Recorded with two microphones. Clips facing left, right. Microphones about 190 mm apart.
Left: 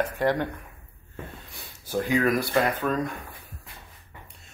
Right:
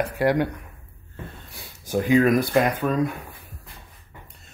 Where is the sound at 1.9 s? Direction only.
20° right (ahead or behind).